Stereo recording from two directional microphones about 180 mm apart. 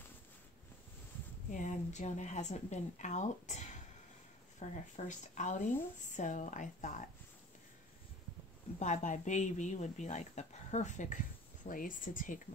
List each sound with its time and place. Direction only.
1.5 s speech: 45° left (ahead or behind)
8.7 s speech: 40° left (ahead or behind)